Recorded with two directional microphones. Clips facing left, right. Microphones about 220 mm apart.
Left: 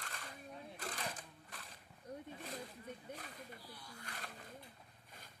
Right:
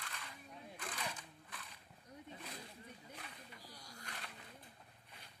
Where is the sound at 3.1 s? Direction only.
40° left (ahead or behind).